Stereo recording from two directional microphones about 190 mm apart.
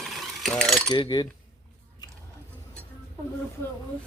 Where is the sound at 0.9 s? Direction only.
25° left (ahead or behind).